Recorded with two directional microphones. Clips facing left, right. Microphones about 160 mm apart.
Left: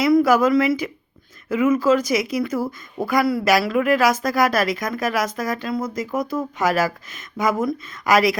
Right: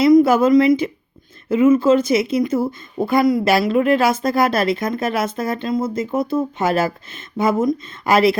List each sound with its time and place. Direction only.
0.0 s speech: 25° right (ahead or behind)